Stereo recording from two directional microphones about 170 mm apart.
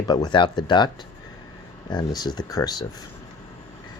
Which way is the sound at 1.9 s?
25° left (ahead or behind).